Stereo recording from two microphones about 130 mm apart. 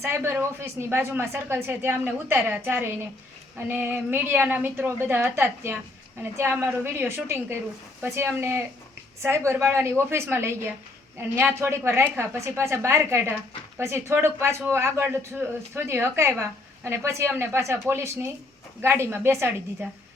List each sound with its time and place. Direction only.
0.0 s a woman's voice: 20° right (ahead or behind)